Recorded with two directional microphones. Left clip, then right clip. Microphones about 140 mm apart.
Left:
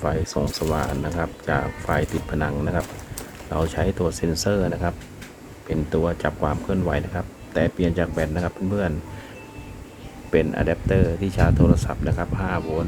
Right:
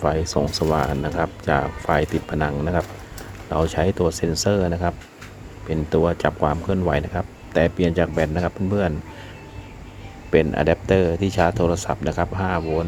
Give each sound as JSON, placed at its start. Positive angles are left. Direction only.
{"t": 0.0, "sound": "speech", "side_deg": -25}
{"t": 10.3, "sound": "speech", "side_deg": -25}